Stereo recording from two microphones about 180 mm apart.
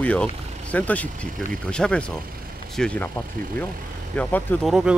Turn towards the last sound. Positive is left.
turn(degrees=-5)  # may be behind; listen again after turning